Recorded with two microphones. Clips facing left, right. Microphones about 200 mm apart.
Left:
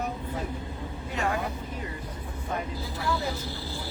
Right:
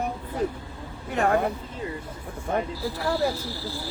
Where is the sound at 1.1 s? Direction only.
55° right (ahead or behind).